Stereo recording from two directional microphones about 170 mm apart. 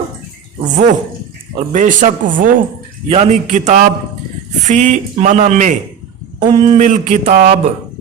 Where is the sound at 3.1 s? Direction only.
40° right (ahead or behind).